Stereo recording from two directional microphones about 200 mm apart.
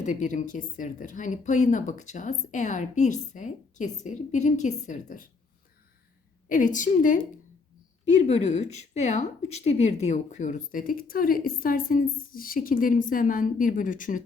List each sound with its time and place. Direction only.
0.0 s a woman's voice: 40° left (ahead or behind)
6.5 s a woman's voice: 40° left (ahead or behind)